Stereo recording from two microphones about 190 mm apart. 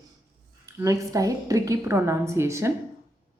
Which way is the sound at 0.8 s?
15° right (ahead or behind).